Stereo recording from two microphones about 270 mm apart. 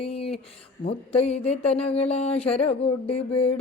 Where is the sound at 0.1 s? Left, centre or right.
Left.